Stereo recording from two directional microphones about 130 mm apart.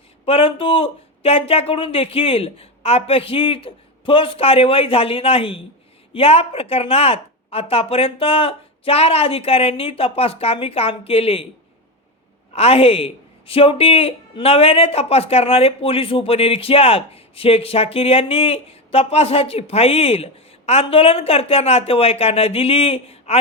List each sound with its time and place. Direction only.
0.3 s speech: 45° left (ahead or behind)
12.5 s speech: 50° left (ahead or behind)